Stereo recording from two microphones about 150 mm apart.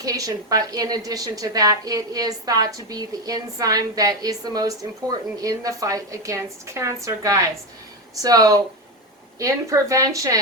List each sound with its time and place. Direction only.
0.0 s a woman's voice: 25° right (ahead or behind)